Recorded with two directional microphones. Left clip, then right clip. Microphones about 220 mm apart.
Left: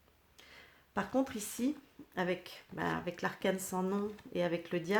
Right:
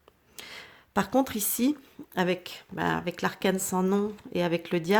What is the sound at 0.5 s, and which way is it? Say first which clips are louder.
Speech: right 9 dB; 35° right (ahead or behind).